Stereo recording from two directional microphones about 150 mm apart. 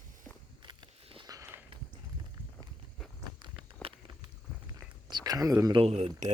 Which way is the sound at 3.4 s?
35° right (ahead or behind).